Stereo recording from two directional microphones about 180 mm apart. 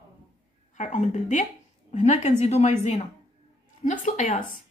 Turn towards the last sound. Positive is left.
turn(degrees=40)  # may be behind; listen again after turning